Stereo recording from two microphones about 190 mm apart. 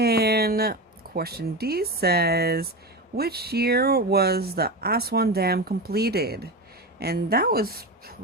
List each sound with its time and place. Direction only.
0.0 s speech: 55° right (ahead or behind)